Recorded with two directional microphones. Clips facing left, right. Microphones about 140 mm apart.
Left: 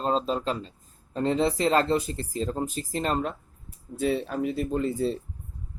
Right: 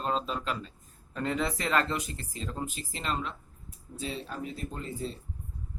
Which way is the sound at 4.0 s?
60° left (ahead or behind).